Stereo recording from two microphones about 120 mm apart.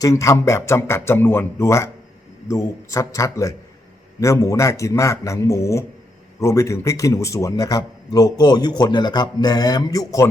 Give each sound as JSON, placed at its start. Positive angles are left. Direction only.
{"t": 0.0, "sound": "a man's voice", "side_deg": 25}